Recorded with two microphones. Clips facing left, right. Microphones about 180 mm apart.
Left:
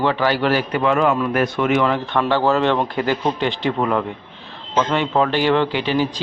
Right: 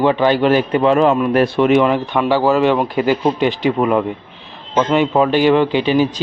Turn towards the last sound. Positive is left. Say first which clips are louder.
# right 5 dB
turn(degrees=-15)  # may be behind; listen again after turning